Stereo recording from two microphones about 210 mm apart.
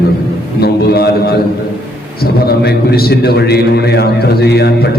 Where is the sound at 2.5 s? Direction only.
45° left (ahead or behind).